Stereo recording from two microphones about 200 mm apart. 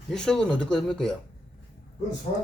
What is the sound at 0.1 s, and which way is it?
Speech, 5° left (ahead or behind).